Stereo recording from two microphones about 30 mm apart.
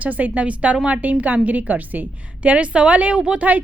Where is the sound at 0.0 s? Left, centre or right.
Right.